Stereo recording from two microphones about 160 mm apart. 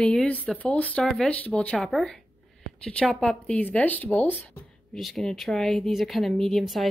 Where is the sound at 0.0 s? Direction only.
5° left (ahead or behind).